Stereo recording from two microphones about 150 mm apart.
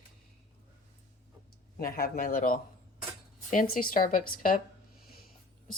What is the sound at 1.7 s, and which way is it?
Speech, 75° left (ahead or behind).